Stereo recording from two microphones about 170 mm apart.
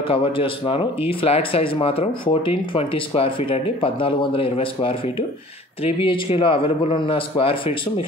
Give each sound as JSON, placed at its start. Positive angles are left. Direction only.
{"t": 0.1, "sound": "speech", "side_deg": 30}
{"t": 5.9, "sound": "speech", "side_deg": 30}